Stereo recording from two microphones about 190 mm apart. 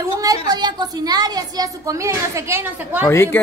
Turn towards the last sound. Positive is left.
turn(degrees=15)  # may be behind; listen again after turning